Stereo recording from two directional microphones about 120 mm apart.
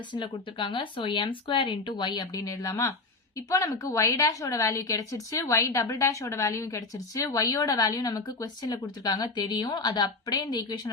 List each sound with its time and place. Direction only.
0.1 s a woman's voice: 40° left (ahead or behind)